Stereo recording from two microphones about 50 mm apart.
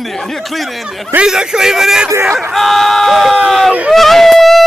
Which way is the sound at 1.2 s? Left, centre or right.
Centre.